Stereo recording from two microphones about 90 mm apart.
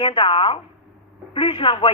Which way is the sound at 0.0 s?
70° left (ahead or behind).